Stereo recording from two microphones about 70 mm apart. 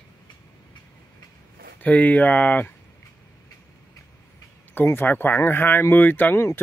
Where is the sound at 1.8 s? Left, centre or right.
Left.